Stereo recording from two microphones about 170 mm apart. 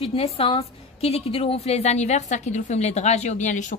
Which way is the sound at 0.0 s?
35° left (ahead or behind).